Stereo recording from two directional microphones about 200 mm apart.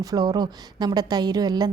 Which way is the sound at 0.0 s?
20° right (ahead or behind).